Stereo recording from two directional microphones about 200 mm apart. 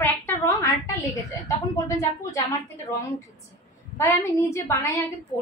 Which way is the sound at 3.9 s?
15° left (ahead or behind).